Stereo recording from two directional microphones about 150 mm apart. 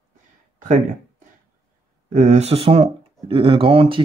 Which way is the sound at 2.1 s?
50° right (ahead or behind).